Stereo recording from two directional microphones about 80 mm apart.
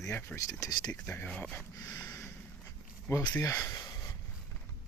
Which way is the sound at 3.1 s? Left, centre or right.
Left.